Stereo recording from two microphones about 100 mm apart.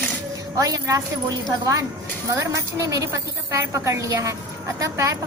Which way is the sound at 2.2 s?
30° right (ahead or behind).